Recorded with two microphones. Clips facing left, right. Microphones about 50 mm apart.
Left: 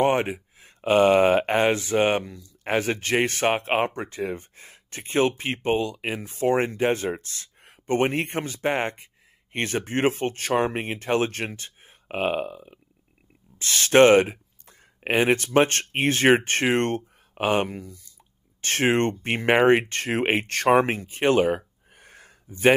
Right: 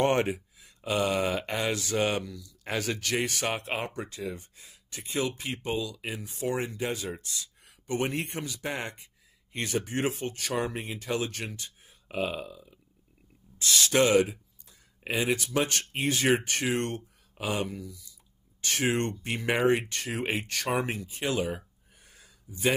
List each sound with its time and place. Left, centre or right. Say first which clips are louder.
0.0 s speech: left 4 dB; centre
0.6 s speech: left 12 dB; left